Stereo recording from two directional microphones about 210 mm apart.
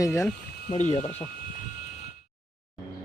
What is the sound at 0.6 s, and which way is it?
Speech, 35° left (ahead or behind).